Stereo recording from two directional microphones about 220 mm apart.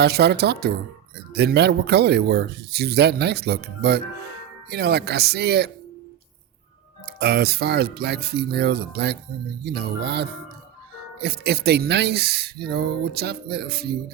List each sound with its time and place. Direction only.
0.0 s speech: 50° right (ahead or behind)
7.2 s speech: 45° right (ahead or behind)